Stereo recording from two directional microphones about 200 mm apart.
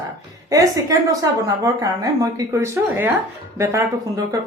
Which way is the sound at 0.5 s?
15° right (ahead or behind).